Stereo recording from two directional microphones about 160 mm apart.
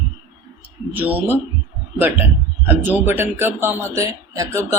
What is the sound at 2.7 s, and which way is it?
Speech, 10° right (ahead or behind).